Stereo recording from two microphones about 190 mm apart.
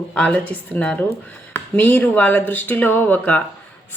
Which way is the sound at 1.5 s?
10° left (ahead or behind).